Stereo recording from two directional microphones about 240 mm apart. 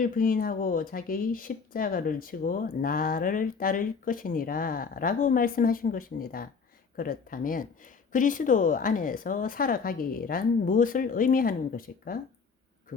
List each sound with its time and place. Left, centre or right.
0.0 s speech: left